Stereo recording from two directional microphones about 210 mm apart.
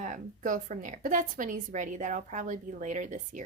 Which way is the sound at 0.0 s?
40° right (ahead or behind).